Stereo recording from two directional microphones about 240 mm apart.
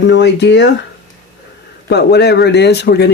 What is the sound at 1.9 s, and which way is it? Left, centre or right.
Speech, left.